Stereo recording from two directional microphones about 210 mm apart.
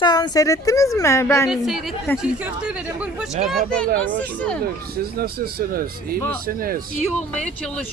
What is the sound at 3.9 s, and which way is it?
A man's voice, 45° right (ahead or behind).